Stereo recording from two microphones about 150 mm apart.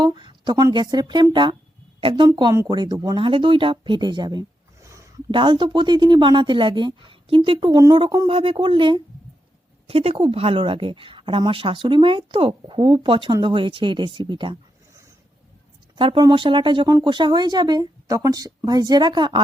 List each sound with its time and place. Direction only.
0.0 s a woman's voice: 30° right (ahead or behind)
5.3 s a woman's voice: 35° right (ahead or behind)
16.0 s a woman's voice: 35° right (ahead or behind)